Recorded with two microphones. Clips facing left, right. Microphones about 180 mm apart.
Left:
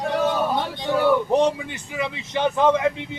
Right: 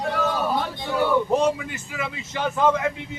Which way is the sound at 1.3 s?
20° left (ahead or behind).